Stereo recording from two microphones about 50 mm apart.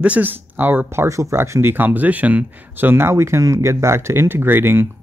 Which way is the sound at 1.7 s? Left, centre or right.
Right.